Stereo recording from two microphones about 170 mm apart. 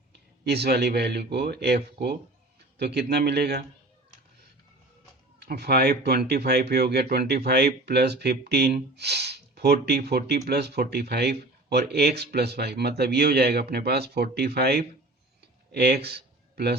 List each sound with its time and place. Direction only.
0.4 s speech: 75° right (ahead or behind)
5.4 s speech: 70° right (ahead or behind)
15.4 s a sound: 70° right (ahead or behind)